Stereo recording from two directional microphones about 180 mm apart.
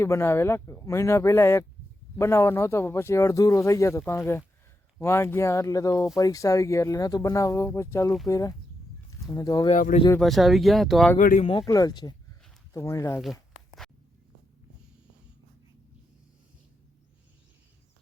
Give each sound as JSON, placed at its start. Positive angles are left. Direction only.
{"t": 0.0, "sound": "speech", "side_deg": 15}
{"t": 9.6, "sound": "speech", "side_deg": 40}
{"t": 10.2, "sound": "speech", "side_deg": 0}
{"t": 11.2, "sound": "speech", "side_deg": 50}
{"t": 11.4, "sound": "speech", "side_deg": 25}
{"t": 13.1, "sound": "a sound", "side_deg": 0}